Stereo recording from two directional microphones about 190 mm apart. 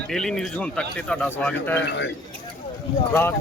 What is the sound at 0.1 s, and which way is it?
Speech, centre (ahead or behind).